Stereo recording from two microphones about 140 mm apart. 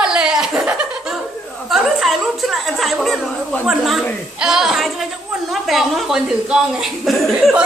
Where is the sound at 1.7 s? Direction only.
Centre (ahead or behind).